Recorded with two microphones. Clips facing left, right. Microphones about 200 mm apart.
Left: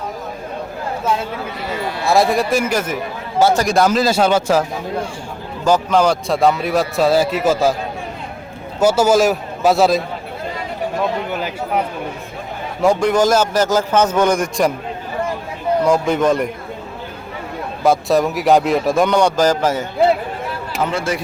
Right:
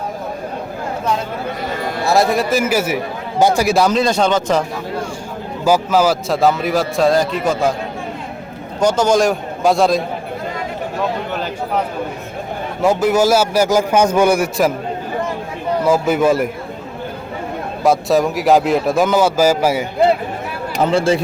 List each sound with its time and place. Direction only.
2.0 s a man's voice: centre (ahead or behind)
3.8 s speech: 5° left (ahead or behind)
5.6 s a man's voice: 5° right (ahead or behind)
8.8 s a man's voice: 5° left (ahead or behind)
11.3 s a sound: 10° left (ahead or behind)
12.8 s a man's voice: 5° right (ahead or behind)
15.8 s a man's voice: 5° right (ahead or behind)
17.8 s a man's voice: centre (ahead or behind)
20.8 s speech: 30° right (ahead or behind)